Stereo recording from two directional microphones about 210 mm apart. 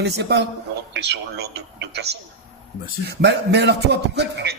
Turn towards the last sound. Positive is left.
turn(degrees=-55)  # may be behind; listen again after turning